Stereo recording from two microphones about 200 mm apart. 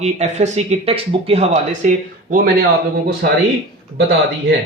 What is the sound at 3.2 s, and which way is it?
Speech, 45° right (ahead or behind).